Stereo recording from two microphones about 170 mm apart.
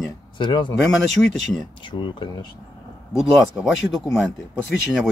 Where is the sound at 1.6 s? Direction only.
30° left (ahead or behind).